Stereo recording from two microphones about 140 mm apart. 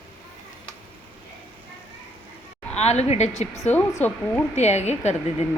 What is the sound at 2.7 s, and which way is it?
Speech, 50° left (ahead or behind).